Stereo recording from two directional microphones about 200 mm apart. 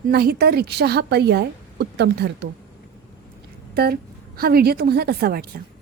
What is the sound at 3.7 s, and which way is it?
A woman's voice, 50° right (ahead or behind).